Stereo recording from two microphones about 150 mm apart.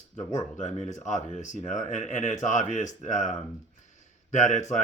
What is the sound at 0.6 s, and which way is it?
Speech, 50° left (ahead or behind).